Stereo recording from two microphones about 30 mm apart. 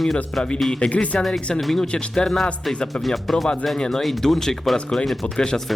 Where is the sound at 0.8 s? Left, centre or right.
Left.